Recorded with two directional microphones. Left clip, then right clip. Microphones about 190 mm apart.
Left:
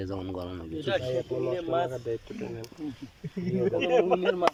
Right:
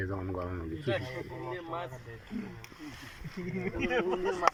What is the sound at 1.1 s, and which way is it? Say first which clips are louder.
Speech: left 10 dB; 55° left (ahead or behind).